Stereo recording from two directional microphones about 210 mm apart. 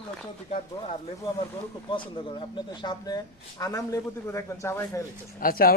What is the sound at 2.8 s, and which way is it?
A man's voice, 20° left (ahead or behind).